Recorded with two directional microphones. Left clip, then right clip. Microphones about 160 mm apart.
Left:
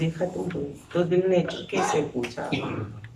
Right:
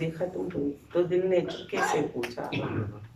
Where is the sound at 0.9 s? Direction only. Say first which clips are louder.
Left 3 dB; centre (ahead or behind).